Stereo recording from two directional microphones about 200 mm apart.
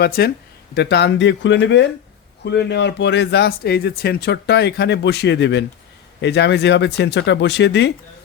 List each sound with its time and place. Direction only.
0.2 s speech: 55° left (ahead or behind)